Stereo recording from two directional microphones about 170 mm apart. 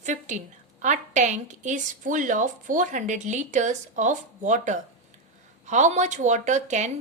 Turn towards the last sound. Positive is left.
turn(degrees=-45)  # may be behind; listen again after turning